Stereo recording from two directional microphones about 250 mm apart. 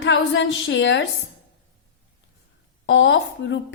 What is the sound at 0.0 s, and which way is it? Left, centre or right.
A woman's voice, left.